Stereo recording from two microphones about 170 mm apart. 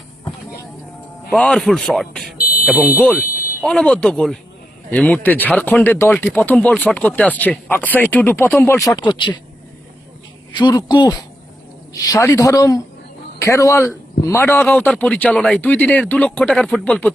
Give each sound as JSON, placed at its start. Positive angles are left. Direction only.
{"t": 1.3, "sound": "speech", "side_deg": 5}
{"t": 2.4, "sound": "fire alarm", "side_deg": 55}
{"t": 2.6, "sound": "speech", "side_deg": -5}
{"t": 10.6, "sound": "a man's voice", "side_deg": 25}